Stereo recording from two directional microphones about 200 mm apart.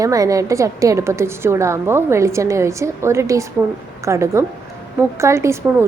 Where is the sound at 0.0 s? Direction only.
15° right (ahead or behind).